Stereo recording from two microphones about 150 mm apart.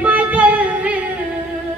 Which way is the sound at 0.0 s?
10° right (ahead or behind).